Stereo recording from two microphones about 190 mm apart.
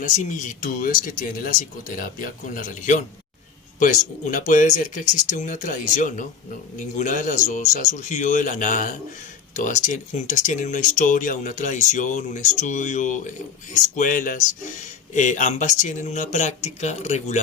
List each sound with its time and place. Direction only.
0.0 s speech: 40° left (ahead or behind)